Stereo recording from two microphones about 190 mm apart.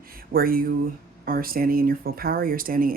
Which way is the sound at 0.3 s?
50° right (ahead or behind).